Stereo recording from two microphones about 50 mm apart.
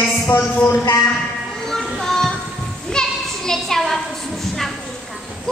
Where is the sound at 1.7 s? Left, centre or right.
Centre.